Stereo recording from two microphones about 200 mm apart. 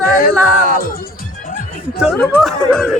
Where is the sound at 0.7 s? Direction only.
45° left (ahead or behind).